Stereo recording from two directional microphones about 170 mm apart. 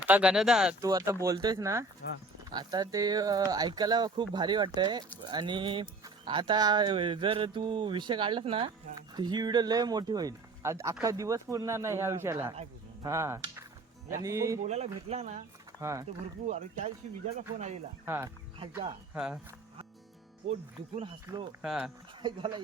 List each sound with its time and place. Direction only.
0.0 s speech: 10° right (ahead or behind)
0.8 s speech: 20° right (ahead or behind)
2.0 s speech: 70° left (ahead or behind)
2.5 s a man's voice: 25° right (ahead or behind)
14.6 s speech: 40° right (ahead or behind)
15.8 s a man's voice: 15° right (ahead or behind)
16.5 s speech: 40° right (ahead or behind)
18.0 s a man's voice: 15° right (ahead or behind)
20.5 s speech: 35° right (ahead or behind)
21.6 s speech: 5° right (ahead or behind)
22.2 s speech: 25° right (ahead or behind)